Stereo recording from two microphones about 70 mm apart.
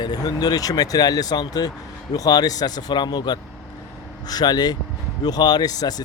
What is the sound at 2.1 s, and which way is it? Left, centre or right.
Speech, left.